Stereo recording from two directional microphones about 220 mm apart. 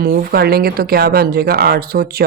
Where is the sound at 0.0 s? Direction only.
45° right (ahead or behind).